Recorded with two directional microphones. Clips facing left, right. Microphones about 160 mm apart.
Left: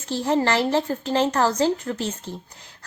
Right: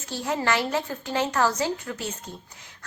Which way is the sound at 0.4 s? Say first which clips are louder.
Left 4 dB; 30° left (ahead or behind).